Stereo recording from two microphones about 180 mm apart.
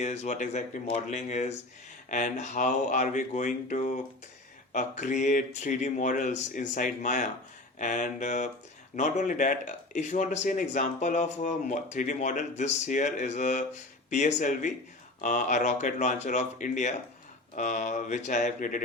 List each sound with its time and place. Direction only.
0.0 s speech: 35° left (ahead or behind)